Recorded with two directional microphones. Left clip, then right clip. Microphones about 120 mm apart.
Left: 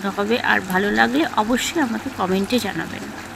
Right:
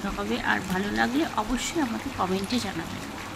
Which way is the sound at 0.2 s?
40° left (ahead or behind).